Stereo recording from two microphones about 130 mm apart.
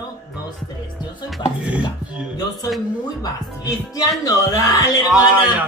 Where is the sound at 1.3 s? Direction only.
10° right (ahead or behind).